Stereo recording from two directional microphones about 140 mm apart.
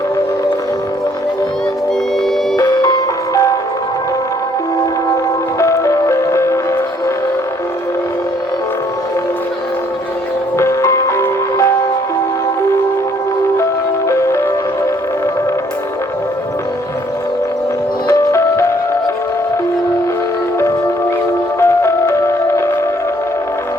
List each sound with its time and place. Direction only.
2.6 s music: 25° left (ahead or behind)
5.5 s music: 20° left (ahead or behind)
10.6 s music: 20° left (ahead or behind)
14.1 s music: 20° left (ahead or behind)
18.1 s music: 20° left (ahead or behind)
21.6 s music: 20° left (ahead or behind)